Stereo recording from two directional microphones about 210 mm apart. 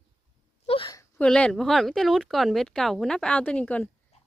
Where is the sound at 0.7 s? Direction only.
20° left (ahead or behind).